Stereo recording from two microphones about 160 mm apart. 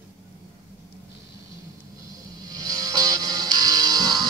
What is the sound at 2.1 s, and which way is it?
Music, 25° right (ahead or behind).